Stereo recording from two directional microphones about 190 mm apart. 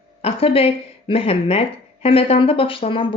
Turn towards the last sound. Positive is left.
turn(degrees=30)  # may be behind; listen again after turning